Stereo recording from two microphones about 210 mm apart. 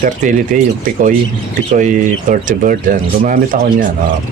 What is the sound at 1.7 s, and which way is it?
Speech, 35° right (ahead or behind).